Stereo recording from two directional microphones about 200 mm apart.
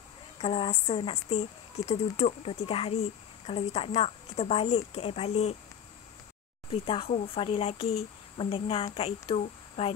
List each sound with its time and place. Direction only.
0.4 s speech: 30° left (ahead or behind)
6.7 s speech: 25° left (ahead or behind)